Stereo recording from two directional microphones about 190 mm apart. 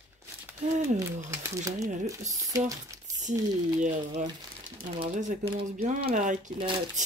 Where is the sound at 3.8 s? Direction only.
35° right (ahead or behind).